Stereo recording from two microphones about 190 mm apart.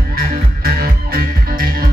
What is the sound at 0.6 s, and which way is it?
Music, 50° right (ahead or behind).